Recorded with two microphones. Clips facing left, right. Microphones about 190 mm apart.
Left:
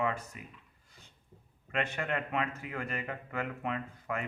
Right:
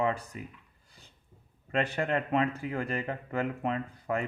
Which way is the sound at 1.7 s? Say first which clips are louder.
Right 5 dB; 35° right (ahead or behind).